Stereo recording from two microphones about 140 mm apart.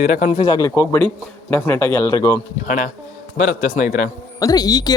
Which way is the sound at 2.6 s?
65° left (ahead or behind).